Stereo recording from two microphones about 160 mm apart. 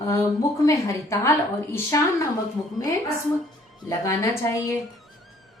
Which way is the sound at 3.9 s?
20° left (ahead or behind).